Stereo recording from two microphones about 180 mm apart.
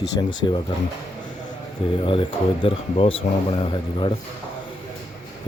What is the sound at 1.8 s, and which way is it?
Speech, 30° left (ahead or behind).